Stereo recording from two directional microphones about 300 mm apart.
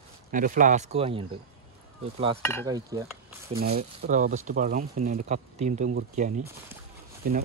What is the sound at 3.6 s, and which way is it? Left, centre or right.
Speech, right.